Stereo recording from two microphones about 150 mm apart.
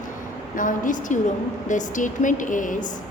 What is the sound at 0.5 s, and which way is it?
A woman's voice, 60° left (ahead or behind).